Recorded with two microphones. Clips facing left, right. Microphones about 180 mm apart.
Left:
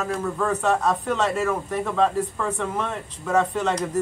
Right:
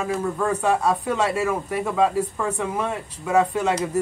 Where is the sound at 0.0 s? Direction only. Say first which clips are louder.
Right 1 dB; 10° right (ahead or behind).